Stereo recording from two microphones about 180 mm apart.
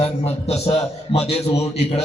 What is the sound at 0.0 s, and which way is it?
Speech, 35° left (ahead or behind).